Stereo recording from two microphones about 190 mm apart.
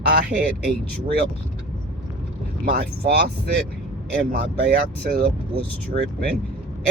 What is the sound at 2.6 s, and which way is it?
Speech, 55° right (ahead or behind).